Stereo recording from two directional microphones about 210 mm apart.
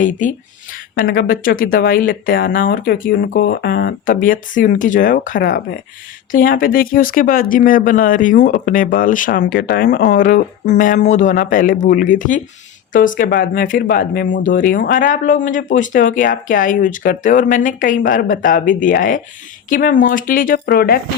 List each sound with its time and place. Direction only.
0.0 s speech: 40° left (ahead or behind)